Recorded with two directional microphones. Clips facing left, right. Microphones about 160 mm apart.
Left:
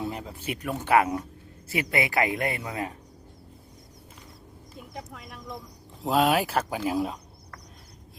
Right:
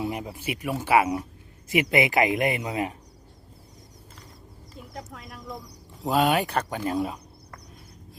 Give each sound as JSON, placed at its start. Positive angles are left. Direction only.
{"t": 0.0, "sound": "speech", "side_deg": -10}
{"t": 1.7, "sound": "speech", "side_deg": -20}
{"t": 4.8, "sound": "speech", "side_deg": 0}